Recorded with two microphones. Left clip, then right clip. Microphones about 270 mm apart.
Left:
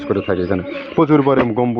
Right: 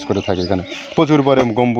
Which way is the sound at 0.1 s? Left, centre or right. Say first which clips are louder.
Right 1 dB; right.